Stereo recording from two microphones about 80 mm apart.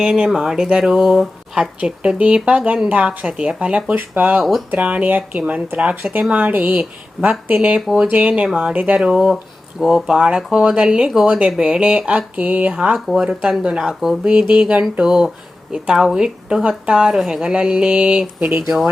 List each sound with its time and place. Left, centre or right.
0.0 s speech: centre
1.8 s speech: centre
8.3 s speech: centre
18.6 s speech: centre